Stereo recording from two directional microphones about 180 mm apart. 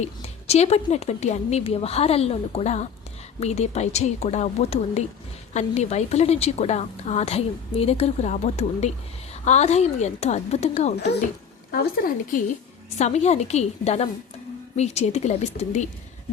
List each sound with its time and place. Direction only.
0.0 s a woman's voice: 35° left (ahead or behind)
11.7 s speech: 55° left (ahead or behind)
13.0 s a woman's voice: 40° left (ahead or behind)